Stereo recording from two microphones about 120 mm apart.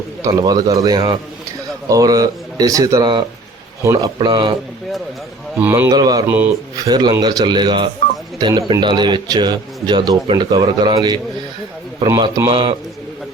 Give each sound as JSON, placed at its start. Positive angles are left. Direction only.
{"t": 0.3, "sound": "a man's voice", "side_deg": -30}
{"t": 5.5, "sound": "a man's voice", "side_deg": -15}
{"t": 5.9, "sound": "a man's voice", "side_deg": -35}
{"t": 6.2, "sound": "a man's voice", "side_deg": -15}
{"t": 6.7, "sound": "a man's voice", "side_deg": -35}